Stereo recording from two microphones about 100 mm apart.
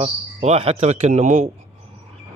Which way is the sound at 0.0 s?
80° right.